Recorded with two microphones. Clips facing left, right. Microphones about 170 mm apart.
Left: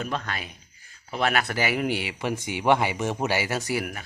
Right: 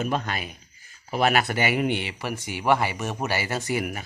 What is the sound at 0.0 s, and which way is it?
Speech, 15° right (ahead or behind).